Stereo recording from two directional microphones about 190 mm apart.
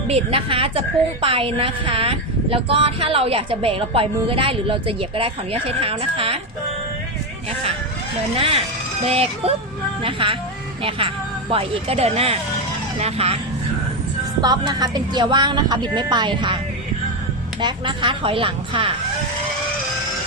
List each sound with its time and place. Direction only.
0.1 s a woman's voice: 30° right (ahead or behind)
8.4 s a woman's voice: 30° right (ahead or behind)
14.4 s a woman's voice: 20° right (ahead or behind)
17.6 s a woman's voice: 25° right (ahead or behind)